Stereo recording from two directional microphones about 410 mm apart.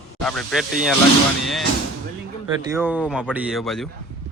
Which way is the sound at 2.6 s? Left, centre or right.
Centre.